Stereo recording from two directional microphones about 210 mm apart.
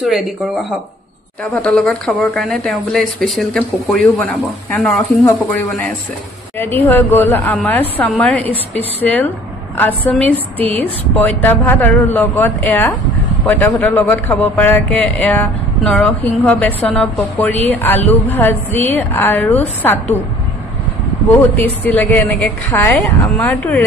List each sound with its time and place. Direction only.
1.4 s a man's voice: 5° left (ahead or behind)
21.3 s a man's voice: 10° left (ahead or behind)